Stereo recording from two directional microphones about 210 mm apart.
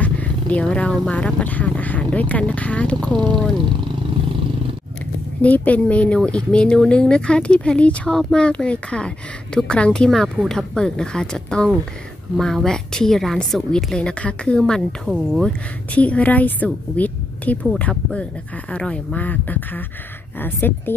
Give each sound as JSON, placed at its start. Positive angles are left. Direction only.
{"t": 0.0, "sound": "speech", "side_deg": 5}
{"t": 3.1, "sound": "speech", "side_deg": -20}
{"t": 5.4, "sound": "speech", "side_deg": 5}